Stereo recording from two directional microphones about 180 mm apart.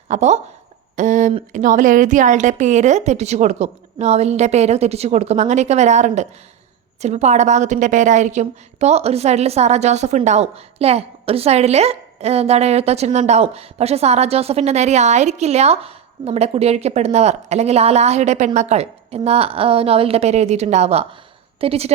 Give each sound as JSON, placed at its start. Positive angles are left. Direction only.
{"t": 0.1, "sound": "a woman's voice", "side_deg": -40}